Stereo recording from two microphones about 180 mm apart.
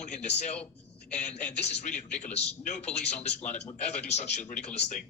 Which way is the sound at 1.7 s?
40° left (ahead or behind).